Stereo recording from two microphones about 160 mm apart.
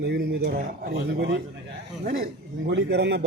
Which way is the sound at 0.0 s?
85° right.